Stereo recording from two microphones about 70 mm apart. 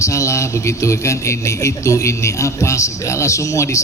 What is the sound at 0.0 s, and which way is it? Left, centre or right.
A man's voice, left.